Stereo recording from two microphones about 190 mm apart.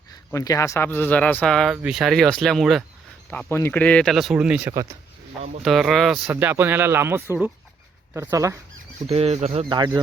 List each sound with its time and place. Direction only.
0.3 s speech: 15° left (ahead or behind); by 6.3 s centre (ahead or behind)
6.3 s speech: 10° right (ahead or behind)
9.0 s speech: 35° right (ahead or behind)